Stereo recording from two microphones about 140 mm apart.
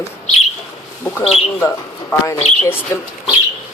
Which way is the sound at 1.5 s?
15° left (ahead or behind).